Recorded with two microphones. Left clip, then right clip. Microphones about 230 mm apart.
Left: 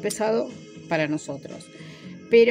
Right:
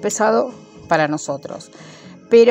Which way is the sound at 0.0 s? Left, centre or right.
Centre.